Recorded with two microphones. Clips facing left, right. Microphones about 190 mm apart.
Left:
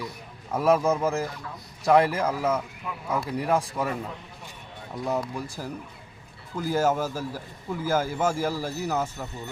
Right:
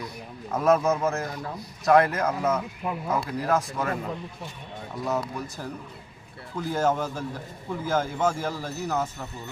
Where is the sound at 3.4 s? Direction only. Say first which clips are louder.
Even; 15° left (ahead or behind).